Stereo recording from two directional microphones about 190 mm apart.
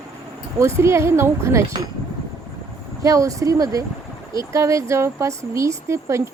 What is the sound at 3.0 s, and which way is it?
Speech, 15° right (ahead or behind).